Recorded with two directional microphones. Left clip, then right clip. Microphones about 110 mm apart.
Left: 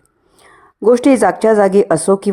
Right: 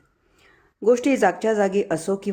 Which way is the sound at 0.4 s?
35° left (ahead or behind).